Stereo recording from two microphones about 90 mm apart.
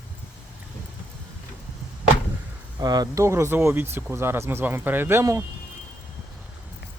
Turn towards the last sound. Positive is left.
turn(degrees=-30)  # may be behind; listen again after turning